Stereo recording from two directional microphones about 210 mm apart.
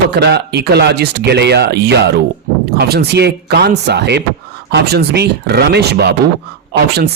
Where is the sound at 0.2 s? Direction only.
50° right (ahead or behind).